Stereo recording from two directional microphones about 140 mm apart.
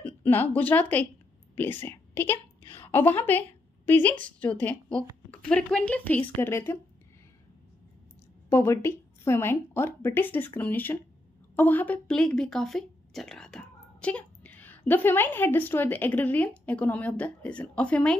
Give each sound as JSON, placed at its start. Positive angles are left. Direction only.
{"t": 0.2, "sound": "a woman's voice", "side_deg": 10}
{"t": 8.5, "sound": "a woman's voice", "side_deg": 20}